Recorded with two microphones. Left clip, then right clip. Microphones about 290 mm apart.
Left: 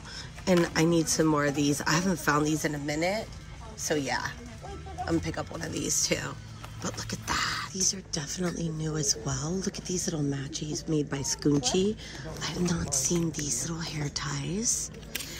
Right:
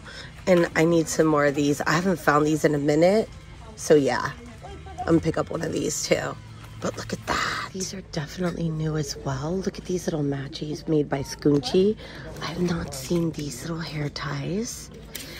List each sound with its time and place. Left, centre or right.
0.5 s speech: centre
3.9 s speech: centre